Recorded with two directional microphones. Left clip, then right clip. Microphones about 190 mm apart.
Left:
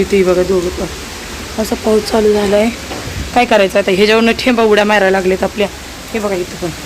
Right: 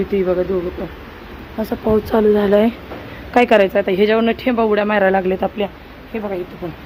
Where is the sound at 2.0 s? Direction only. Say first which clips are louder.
Left 3 dB; 25° right (ahead or behind).